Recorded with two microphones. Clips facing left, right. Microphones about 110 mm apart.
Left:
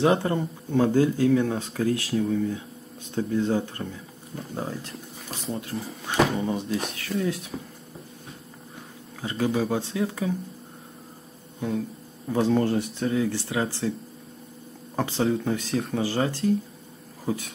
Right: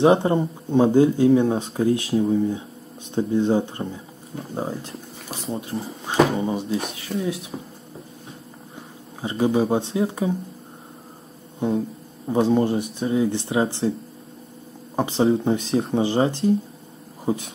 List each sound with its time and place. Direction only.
0.0 s speech: 25° right (ahead or behind)
6.4 s speech: 15° right (ahead or behind)
9.2 s speech: 25° right (ahead or behind)
11.6 s speech: 20° right (ahead or behind)
15.0 s speech: 20° right (ahead or behind)
17.2 s a sound: 25° right (ahead or behind)